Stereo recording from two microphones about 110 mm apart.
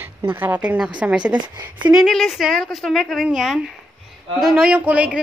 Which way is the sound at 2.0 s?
5° left (ahead or behind).